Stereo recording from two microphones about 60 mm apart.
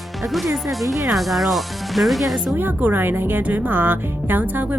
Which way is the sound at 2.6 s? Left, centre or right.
Right.